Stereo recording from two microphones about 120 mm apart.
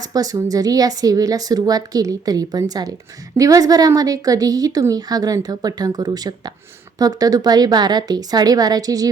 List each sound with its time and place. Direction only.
0.0 s a woman's voice: 30° right (ahead or behind)